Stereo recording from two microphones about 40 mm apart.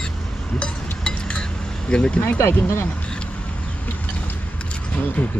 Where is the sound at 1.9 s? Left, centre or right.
Left.